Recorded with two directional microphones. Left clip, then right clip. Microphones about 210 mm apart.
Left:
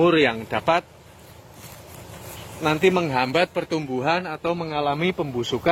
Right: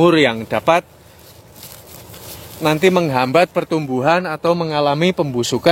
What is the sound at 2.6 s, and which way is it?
Speech, 55° right (ahead or behind).